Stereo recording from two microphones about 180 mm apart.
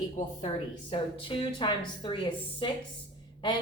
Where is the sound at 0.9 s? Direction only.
30° left (ahead or behind).